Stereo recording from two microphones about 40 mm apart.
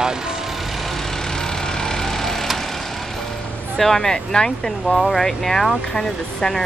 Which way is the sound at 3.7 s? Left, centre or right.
Centre.